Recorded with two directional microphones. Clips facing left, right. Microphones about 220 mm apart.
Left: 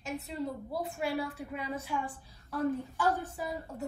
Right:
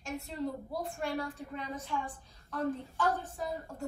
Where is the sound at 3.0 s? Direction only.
15° left (ahead or behind).